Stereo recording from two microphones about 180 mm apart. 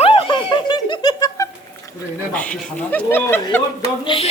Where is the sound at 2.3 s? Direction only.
5° left (ahead or behind).